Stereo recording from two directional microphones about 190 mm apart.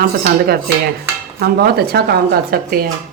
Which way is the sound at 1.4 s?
55° right (ahead or behind).